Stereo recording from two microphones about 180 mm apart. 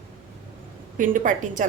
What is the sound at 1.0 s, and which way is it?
Speech, 45° right (ahead or behind).